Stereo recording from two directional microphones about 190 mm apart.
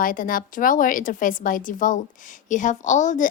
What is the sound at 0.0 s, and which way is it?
A woman's voice, 45° left (ahead or behind).